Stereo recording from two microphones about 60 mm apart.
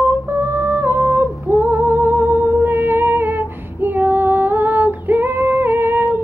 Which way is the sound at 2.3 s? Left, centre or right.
Right.